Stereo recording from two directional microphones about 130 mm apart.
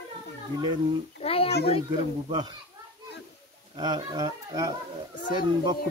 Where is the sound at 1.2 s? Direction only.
50° left (ahead or behind).